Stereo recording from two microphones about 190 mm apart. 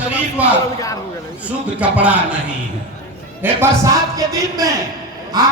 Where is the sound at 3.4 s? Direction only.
15° right (ahead or behind).